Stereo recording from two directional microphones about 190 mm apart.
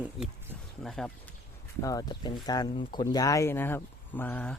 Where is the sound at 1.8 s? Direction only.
20° left (ahead or behind).